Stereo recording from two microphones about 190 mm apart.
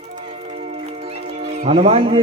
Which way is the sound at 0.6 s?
30° right (ahead or behind).